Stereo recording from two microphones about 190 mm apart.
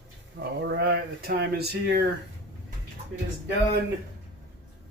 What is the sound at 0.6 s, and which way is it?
Speech, 60° right (ahead or behind).